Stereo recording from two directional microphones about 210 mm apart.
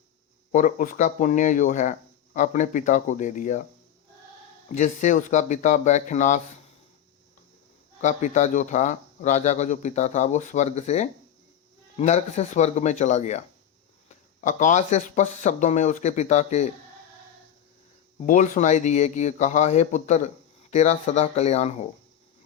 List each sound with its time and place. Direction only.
0.5 s speech: 40° left (ahead or behind)
4.7 s speech: 35° left (ahead or behind)
8.0 s speech: 35° left (ahead or behind)
14.4 s speech: 35° left (ahead or behind)
18.3 s speech: 40° left (ahead or behind)